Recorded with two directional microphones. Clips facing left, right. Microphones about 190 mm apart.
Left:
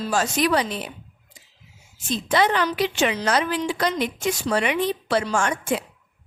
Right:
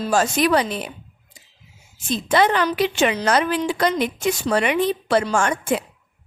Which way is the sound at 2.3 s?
55° right (ahead or behind).